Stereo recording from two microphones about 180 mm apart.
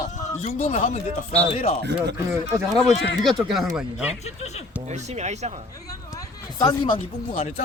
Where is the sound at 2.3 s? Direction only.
15° right (ahead or behind).